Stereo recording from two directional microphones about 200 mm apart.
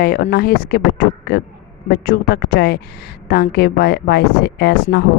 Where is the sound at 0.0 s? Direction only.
50° left (ahead or behind).